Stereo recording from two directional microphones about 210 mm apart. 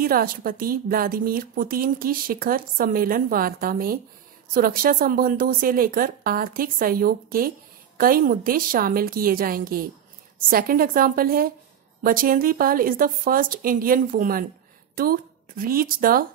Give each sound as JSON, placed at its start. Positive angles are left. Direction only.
{"t": 0.0, "sound": "a woman's voice", "side_deg": -45}